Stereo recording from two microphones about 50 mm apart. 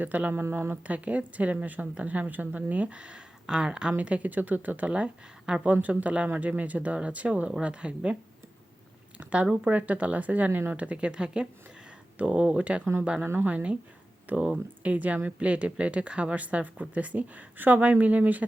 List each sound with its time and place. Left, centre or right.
0.0 s a woman's voice: right; by 3.9 s centre
3.9 s speech: right
4.9 s a woman's voice: right
5.6 s a woman's voice: right
9.1 s a woman's voice: right
13.2 s speech: right
13.5 s a woman's voice: right